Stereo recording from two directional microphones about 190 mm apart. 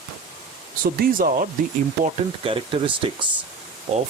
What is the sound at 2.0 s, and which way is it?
Speech, 30° right (ahead or behind).